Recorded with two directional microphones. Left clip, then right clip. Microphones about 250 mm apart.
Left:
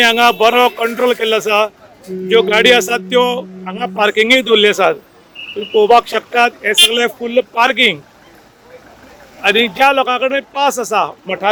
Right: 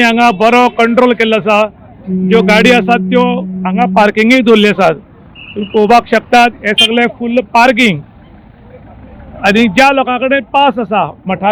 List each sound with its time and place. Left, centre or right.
0.0 s a man's voice: left
7.5 s a man's voice: left
9.4 s a man's voice: centre